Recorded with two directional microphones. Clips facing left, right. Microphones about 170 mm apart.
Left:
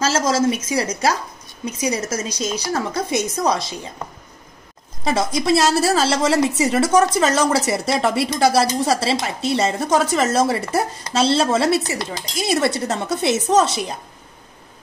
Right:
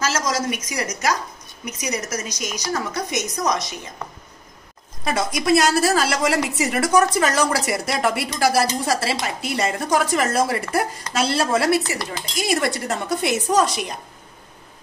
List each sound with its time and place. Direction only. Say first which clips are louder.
0.0 s speech: left 5 dB; 30° left (ahead or behind)
5.0 s speech: left 2 dB; 20° left (ahead or behind)